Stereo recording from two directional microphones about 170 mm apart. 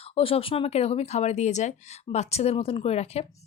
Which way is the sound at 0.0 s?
35° left (ahead or behind).